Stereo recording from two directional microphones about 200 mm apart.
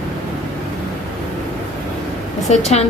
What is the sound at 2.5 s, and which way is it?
Speech, 35° left (ahead or behind).